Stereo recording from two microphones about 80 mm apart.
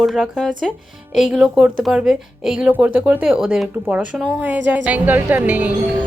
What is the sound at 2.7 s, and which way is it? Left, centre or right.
A woman's voice, centre.